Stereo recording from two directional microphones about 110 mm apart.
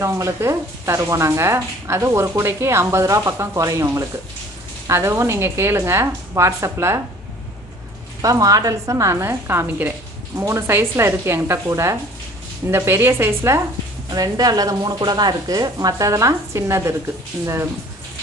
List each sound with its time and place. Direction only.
0.0 s speech: 25° right (ahead or behind)
8.2 s speech: 30° right (ahead or behind)
14.1 s a woman's voice: 35° right (ahead or behind)